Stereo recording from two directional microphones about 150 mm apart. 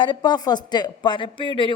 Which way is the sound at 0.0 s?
30° left (ahead or behind).